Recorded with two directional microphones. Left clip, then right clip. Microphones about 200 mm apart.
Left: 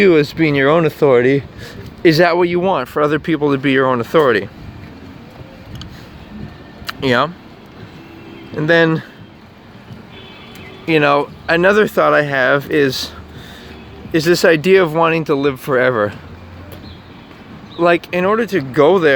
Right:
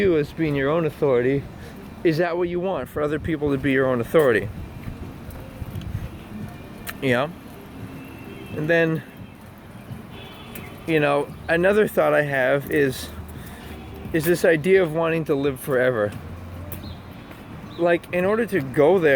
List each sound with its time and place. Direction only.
0.0 s speech: 50° left (ahead or behind); by 4.4 s 25° left (ahead or behind)
7.0 s speech: 30° left (ahead or behind)
8.5 s speech: 35° left (ahead or behind)
10.8 s speech: 35° left (ahead or behind)
14.1 s speech: 35° left (ahead or behind)
17.7 s speech: 35° left (ahead or behind)